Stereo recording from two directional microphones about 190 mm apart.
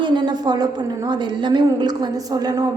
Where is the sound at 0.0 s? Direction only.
20° right (ahead or behind).